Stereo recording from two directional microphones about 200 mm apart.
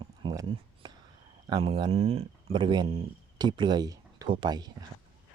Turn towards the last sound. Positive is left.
turn(degrees=-20)  # may be behind; listen again after turning